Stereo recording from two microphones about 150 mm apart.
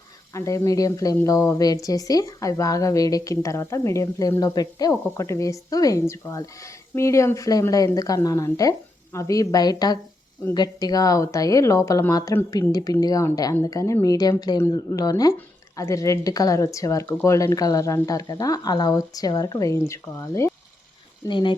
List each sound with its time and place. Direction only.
0.3 s a woman's voice: 20° left (ahead or behind)
21.2 s speech: 30° left (ahead or behind)